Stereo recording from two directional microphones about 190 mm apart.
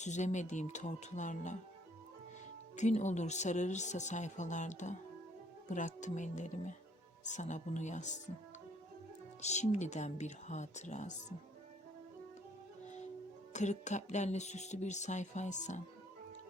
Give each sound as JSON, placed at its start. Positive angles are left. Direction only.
{"t": 0.0, "sound": "speech", "side_deg": 40}
{"t": 2.7, "sound": "speech", "side_deg": 40}
{"t": 9.4, "sound": "speech", "side_deg": 35}
{"t": 13.5, "sound": "speech", "side_deg": 40}